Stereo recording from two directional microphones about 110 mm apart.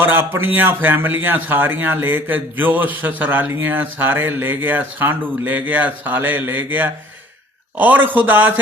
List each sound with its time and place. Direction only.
0.0 s speech: 15° right (ahead or behind)